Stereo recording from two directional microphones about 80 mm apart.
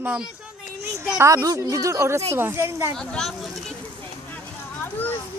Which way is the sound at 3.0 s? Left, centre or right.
Centre.